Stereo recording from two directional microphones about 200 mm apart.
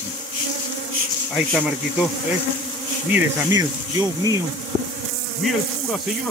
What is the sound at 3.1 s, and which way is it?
Speech, 10° right (ahead or behind).